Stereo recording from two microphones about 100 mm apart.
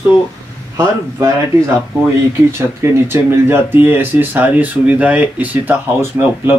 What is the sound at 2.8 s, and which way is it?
Speech, 25° right (ahead or behind).